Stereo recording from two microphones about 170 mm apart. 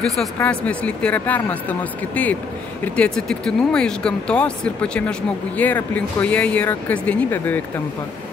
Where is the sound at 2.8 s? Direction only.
5° left (ahead or behind).